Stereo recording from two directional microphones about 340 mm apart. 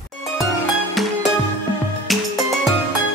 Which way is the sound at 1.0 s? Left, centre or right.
Centre.